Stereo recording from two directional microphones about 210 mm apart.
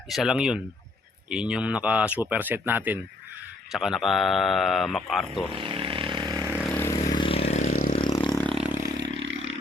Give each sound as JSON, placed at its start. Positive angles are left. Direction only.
{"t": 0.1, "sound": "speech", "side_deg": 0}
{"t": 5.5, "sound": "vehicle", "side_deg": -25}
{"t": 6.6, "sound": "vehicle", "side_deg": 10}
{"t": 7.1, "sound": "vehicle", "side_deg": 25}
{"t": 7.7, "sound": "vehicle", "side_deg": 45}
{"t": 7.9, "sound": "vehicle", "side_deg": 20}
{"t": 8.4, "sound": "vehicle", "side_deg": 0}
{"t": 9.0, "sound": "vehicle", "side_deg": -55}